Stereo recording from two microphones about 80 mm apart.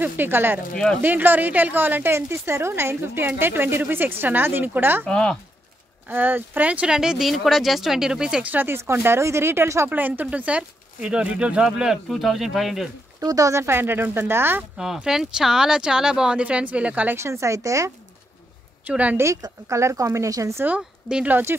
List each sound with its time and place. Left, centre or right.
0.0 s speech: right
5.0 s speech: centre
6.0 s speech: right
9.8 s speech: right
12.1 s speech: centre
13.2 s speech: right
14.8 s speech: centre
17.2 s speech: right
18.9 s speech: centre
19.7 s speech: right
20.6 s speech: centre